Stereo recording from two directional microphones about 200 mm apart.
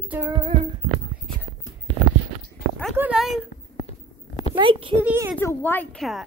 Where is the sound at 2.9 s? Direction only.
5° right (ahead or behind).